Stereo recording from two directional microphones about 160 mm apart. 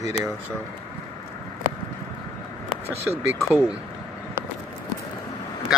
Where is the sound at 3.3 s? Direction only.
15° left (ahead or behind).